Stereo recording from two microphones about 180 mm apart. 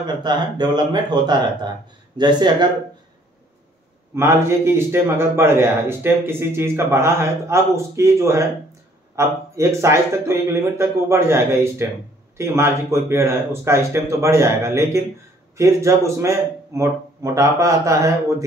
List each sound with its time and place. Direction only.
0.0 s speech: 25° right (ahead or behind)
4.1 s a man's voice: 15° right (ahead or behind)